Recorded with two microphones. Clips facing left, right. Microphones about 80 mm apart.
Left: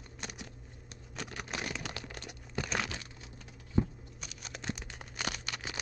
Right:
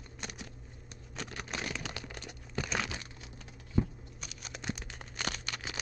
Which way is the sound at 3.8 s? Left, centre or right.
Left.